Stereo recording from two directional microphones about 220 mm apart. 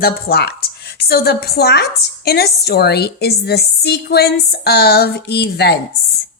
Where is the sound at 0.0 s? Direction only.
45° left (ahead or behind).